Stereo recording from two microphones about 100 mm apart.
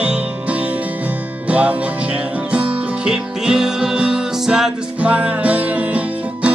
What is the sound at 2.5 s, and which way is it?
Music, 10° right (ahead or behind).